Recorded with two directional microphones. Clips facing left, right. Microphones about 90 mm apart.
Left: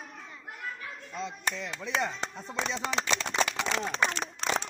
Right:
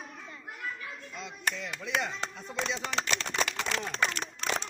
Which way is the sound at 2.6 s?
20° left (ahead or behind).